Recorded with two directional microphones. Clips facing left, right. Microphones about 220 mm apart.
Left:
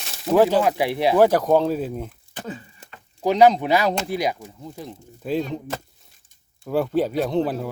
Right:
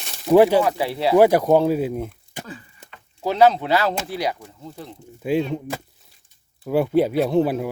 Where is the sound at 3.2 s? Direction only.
15° left (ahead or behind).